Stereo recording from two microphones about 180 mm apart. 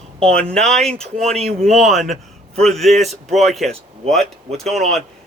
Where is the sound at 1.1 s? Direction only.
35° right (ahead or behind).